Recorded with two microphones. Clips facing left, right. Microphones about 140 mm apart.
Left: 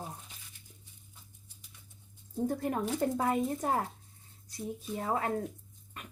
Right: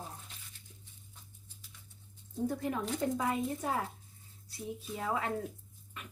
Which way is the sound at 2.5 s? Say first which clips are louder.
Left 3 dB; 50° left (ahead or behind).